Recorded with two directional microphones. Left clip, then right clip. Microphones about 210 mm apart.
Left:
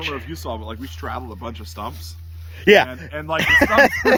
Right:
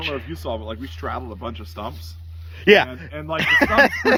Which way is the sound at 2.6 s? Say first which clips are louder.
Left 1 dB; 15° left (ahead or behind).